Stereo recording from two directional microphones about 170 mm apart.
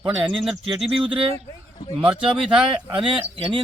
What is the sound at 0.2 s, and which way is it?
Speech, centre (ahead or behind).